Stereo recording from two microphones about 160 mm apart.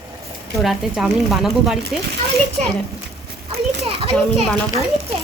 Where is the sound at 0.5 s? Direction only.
Centre (ahead or behind).